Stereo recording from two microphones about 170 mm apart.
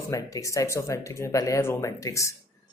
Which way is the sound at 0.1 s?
20° left (ahead or behind).